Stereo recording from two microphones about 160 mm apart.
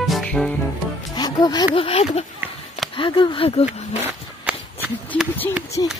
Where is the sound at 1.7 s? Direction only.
35° left (ahead or behind).